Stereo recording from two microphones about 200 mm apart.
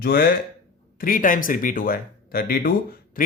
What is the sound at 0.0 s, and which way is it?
Speech, 50° left (ahead or behind).